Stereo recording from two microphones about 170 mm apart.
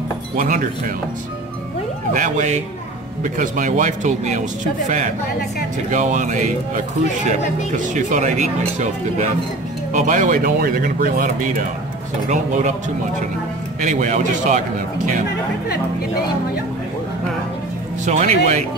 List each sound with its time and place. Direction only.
2.1 s speech: 50° right (ahead or behind)
13.8 s speech: 45° right (ahead or behind)
18.0 s speech: 45° right (ahead or behind)